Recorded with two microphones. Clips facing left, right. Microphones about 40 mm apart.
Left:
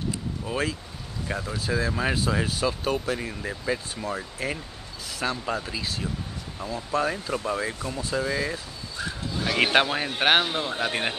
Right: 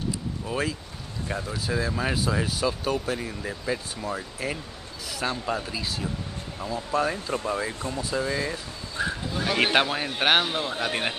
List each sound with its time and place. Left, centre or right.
0.5 s speech: centre
9.0 s a sound: right
9.4 s speech: centre